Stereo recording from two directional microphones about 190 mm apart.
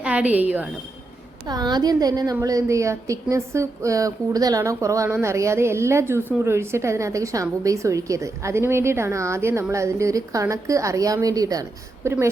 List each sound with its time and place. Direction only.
0.0 s a woman's voice: 5° right (ahead or behind)
1.5 s a woman's voice: 20° right (ahead or behind)